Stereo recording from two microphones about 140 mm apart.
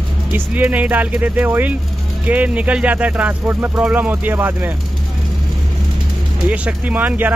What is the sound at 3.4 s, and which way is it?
Speech, 25° right (ahead or behind).